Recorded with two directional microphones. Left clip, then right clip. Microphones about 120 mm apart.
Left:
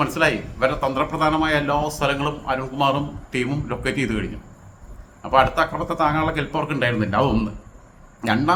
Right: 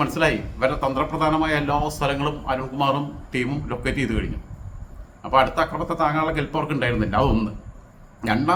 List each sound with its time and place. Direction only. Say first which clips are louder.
0.0 s a man's voice: left 1 dB; 10° left (ahead or behind)